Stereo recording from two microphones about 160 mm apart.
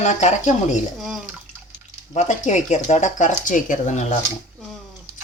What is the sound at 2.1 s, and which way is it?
Speech, 45° left (ahead or behind).